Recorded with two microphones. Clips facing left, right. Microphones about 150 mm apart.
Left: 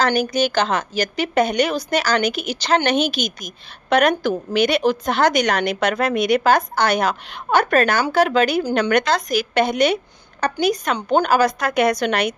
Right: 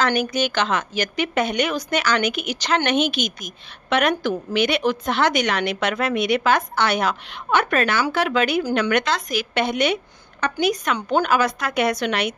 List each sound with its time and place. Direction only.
0.0 s a woman's voice: 35° left (ahead or behind)